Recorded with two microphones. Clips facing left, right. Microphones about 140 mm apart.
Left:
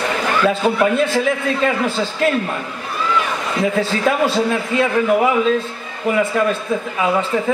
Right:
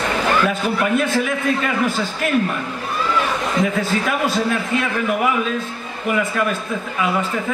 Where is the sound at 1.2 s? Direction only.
25° left (ahead or behind).